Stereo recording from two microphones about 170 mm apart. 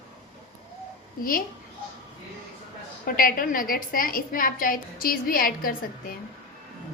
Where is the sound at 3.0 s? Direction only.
55° left (ahead or behind).